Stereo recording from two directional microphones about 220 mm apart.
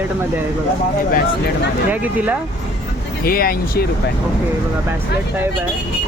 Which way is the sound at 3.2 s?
40° left (ahead or behind).